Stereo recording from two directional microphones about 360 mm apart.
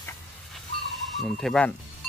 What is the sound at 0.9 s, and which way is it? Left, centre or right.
Speech, centre.